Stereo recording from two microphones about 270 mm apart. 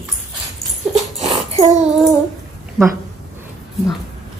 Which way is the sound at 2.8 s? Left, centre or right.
Centre.